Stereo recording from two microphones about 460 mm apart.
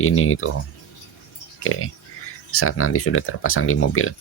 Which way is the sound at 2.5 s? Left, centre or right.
Left.